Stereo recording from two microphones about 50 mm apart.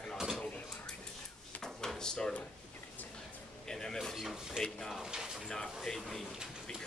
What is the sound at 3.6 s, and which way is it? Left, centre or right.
Speech, centre.